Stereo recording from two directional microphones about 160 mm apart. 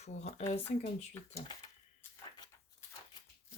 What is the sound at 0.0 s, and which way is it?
Speech, 45° left (ahead or behind).